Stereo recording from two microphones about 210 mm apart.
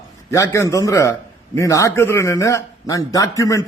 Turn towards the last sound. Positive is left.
turn(degrees=15)  # may be behind; listen again after turning